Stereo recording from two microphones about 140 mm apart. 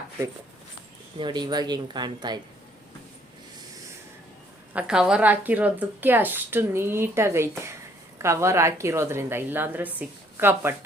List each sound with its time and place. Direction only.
1.2 s speech: 30° right (ahead or behind)
4.7 s speech: 5° right (ahead or behind)